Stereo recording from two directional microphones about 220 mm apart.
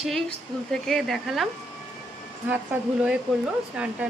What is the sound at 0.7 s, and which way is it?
Speech, centre (ahead or behind).